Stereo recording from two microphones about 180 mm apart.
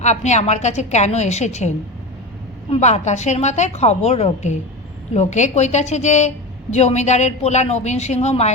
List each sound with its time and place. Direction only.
0.0 s a woman's voice: 40° left (ahead or behind)
2.7 s a woman's voice: 40° left (ahead or behind)